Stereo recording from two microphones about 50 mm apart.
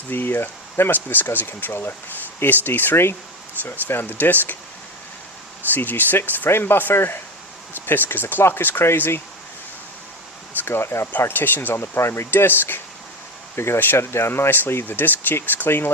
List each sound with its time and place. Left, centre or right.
0.1 s speech: left
5.7 s speech: left
10.7 s speech: left
11.9 s speech: left